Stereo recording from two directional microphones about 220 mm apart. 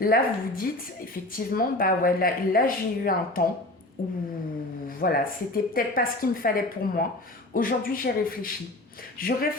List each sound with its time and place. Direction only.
0.0 s a woman's voice: 40° left (ahead or behind)